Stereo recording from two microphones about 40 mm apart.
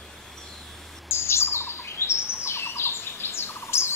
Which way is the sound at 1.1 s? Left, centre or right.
Left.